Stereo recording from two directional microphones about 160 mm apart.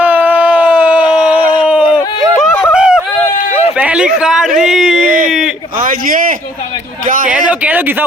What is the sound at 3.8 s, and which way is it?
A man's voice, 5° right (ahead or behind).